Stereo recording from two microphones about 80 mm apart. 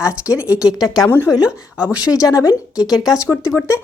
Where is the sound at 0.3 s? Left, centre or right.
Centre.